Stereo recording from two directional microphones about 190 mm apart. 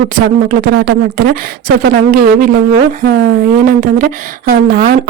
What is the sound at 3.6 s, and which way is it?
Speech, 45° right (ahead or behind).